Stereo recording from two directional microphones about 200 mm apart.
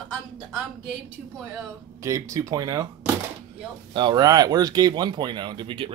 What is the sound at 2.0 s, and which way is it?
Speech, 15° right (ahead or behind).